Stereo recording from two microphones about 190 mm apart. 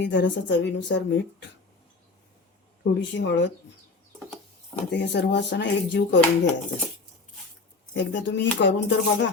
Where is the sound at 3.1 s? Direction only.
70° left (ahead or behind).